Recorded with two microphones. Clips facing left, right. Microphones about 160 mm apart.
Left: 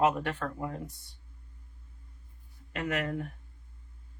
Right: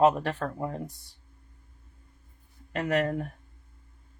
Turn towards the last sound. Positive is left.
turn(degrees=-40)  # may be behind; listen again after turning